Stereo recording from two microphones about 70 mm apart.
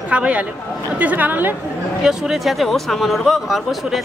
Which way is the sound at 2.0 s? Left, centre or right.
Centre.